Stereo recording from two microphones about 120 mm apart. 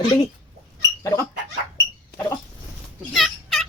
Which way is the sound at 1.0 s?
25° left (ahead or behind).